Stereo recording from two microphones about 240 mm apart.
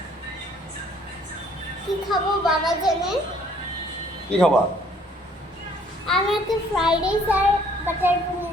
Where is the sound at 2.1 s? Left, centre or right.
Centre.